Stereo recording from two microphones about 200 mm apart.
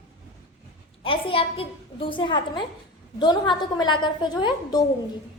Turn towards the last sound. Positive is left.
turn(degrees=20)  # may be behind; listen again after turning